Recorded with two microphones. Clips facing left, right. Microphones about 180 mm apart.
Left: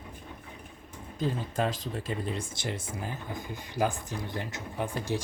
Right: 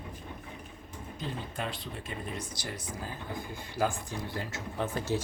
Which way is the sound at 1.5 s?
40° left (ahead or behind).